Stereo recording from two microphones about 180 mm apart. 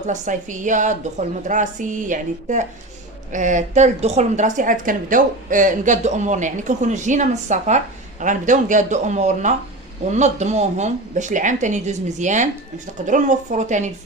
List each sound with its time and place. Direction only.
0.0 s a woman's voice: 45° right (ahead or behind)